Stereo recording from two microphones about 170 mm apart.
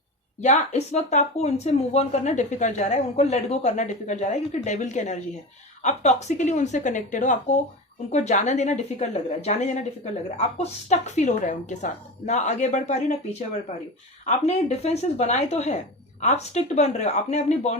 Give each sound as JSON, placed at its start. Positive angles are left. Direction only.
{"t": 0.4, "sound": "a woman's voice", "side_deg": 40}
{"t": 14.3, "sound": "speech", "side_deg": 40}